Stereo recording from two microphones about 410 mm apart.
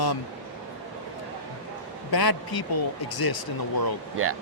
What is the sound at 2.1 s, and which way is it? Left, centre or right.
Speech, left.